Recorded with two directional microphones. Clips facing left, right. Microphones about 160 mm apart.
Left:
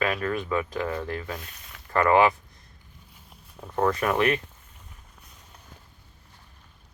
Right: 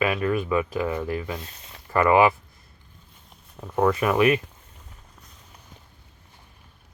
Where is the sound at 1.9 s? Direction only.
10° right (ahead or behind).